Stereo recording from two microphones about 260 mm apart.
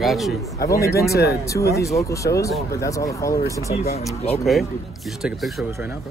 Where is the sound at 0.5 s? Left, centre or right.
Centre.